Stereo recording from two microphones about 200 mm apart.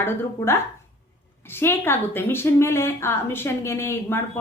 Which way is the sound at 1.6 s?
10° left (ahead or behind).